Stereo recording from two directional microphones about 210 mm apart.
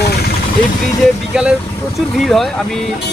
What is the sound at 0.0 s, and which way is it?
Vehicle, 50° left (ahead or behind).